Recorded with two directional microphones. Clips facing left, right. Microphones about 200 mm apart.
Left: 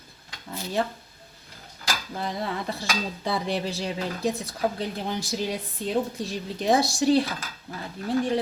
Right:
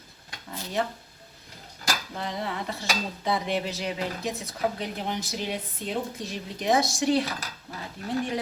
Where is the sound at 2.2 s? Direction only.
35° left (ahead or behind).